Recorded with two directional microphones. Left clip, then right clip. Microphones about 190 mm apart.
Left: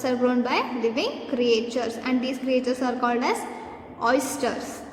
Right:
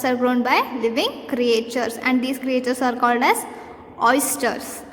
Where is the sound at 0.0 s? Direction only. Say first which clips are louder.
Right 3 dB; 30° right (ahead or behind).